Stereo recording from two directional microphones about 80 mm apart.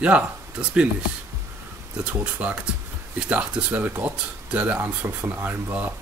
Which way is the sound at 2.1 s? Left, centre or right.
Centre.